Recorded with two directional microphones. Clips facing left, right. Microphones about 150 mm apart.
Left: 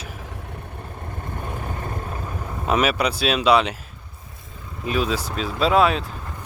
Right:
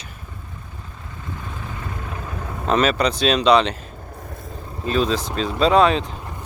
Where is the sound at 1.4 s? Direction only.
55° left (ahead or behind).